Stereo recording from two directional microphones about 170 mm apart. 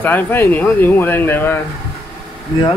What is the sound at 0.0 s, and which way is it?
Speech, 10° left (ahead or behind).